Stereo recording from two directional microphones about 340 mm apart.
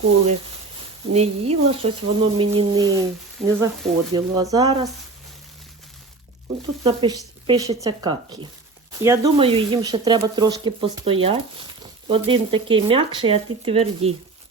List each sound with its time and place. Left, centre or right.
1.1 s speech: centre
6.8 s speech: centre